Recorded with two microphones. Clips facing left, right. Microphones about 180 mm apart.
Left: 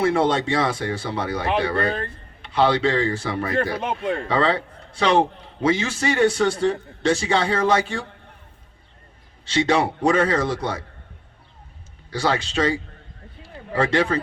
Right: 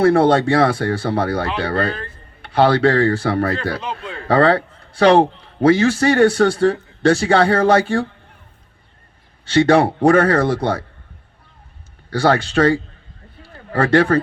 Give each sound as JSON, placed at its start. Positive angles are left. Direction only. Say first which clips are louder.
{"t": 0.0, "sound": "a man's voice", "louder": "right 6 dB", "side_deg": -60}
{"t": 4.0, "sound": "speech", "louder": "left 7 dB", "side_deg": 55}
{"t": 4.3, "sound": "a man's voice", "louder": "right 10 dB", "side_deg": -60}
{"t": 9.4, "sound": "a man's voice", "louder": "right 7 dB", "side_deg": -55}
{"t": 12.1, "sound": "a man's voice", "louder": "right 7 dB", "side_deg": -55}